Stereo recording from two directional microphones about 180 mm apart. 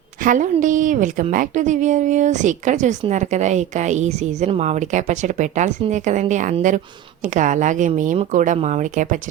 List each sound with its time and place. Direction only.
0.2 s a woman's voice: 45° right (ahead or behind)